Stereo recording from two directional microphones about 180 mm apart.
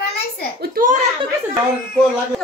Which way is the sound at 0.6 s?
50° right (ahead or behind).